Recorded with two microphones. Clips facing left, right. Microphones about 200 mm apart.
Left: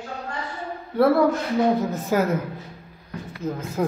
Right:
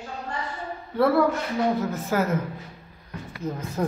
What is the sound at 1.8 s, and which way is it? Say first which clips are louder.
Speech: left 3 dB; 15° left (ahead or behind).